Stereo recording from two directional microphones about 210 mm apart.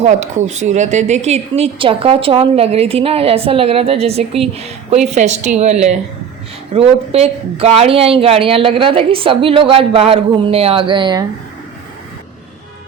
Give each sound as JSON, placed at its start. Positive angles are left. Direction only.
{"t": 0.0, "sound": "a woman's voice", "side_deg": -35}
{"t": 6.7, "sound": "a woman's voice", "side_deg": -30}